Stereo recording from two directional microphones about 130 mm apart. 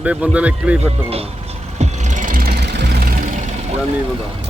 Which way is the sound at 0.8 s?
50° right (ahead or behind).